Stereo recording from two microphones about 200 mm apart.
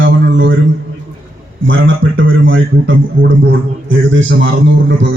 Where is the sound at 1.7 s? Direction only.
70° right (ahead or behind).